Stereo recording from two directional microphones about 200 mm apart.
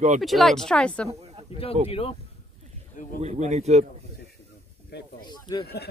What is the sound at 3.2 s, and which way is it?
Speech, 35° right (ahead or behind).